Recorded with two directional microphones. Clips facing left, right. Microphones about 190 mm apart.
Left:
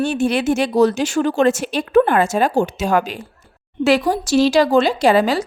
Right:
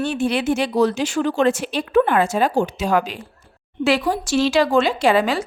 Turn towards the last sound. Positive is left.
turn(degrees=40)  # may be behind; listen again after turning